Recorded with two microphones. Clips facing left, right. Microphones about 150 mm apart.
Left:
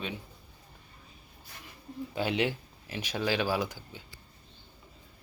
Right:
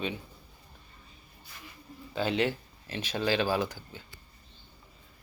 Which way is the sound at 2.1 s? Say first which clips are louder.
Right 1 dB; 10° left (ahead or behind).